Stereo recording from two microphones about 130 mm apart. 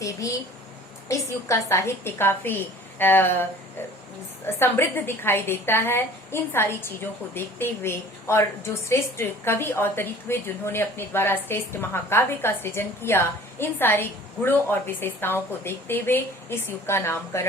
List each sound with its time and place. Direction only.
0.0 s a woman's voice: 25° left (ahead or behind)
4.6 s a woman's voice: 20° left (ahead or behind)